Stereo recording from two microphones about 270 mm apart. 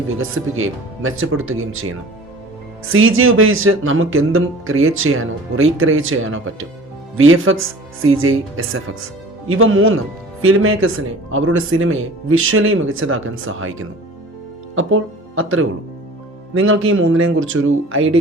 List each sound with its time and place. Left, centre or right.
0.2 s speech: right